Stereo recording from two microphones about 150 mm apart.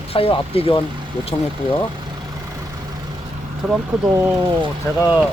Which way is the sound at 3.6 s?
Centre (ahead or behind).